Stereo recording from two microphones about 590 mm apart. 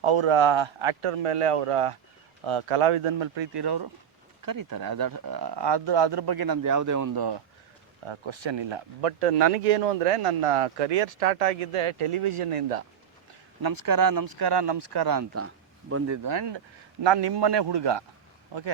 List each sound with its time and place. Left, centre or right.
0.0 s speech: right
8.0 s speech: right
13.6 s speech: right
16.2 s speech: right